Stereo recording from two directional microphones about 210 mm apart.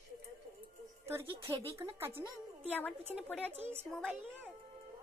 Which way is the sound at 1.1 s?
10° right (ahead or behind).